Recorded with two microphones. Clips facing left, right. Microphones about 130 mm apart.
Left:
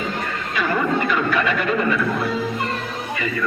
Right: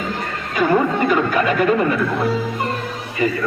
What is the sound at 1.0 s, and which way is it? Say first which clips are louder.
Speech: right 4 dB; 40° right (ahead or behind).